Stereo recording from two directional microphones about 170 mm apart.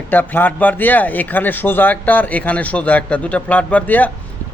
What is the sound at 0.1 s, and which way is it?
Speech, 10° left (ahead or behind).